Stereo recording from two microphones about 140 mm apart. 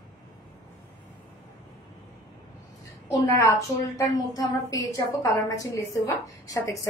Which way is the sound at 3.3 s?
20° left (ahead or behind).